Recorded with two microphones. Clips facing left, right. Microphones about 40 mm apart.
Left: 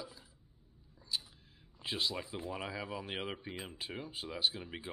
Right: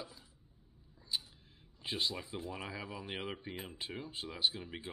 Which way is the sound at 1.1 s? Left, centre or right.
Centre.